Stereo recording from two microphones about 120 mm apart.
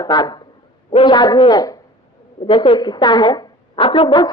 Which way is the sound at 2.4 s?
45° left (ahead or behind).